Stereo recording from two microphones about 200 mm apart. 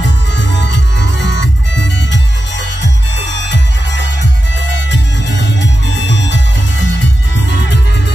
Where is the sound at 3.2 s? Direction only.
60° left (ahead or behind).